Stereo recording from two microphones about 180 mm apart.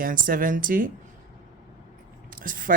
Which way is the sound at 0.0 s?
50° right (ahead or behind).